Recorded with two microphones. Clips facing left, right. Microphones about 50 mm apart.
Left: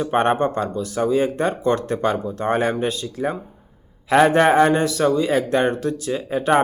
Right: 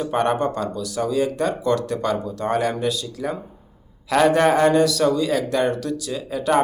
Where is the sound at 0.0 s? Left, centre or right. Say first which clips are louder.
Left 2 dB; left.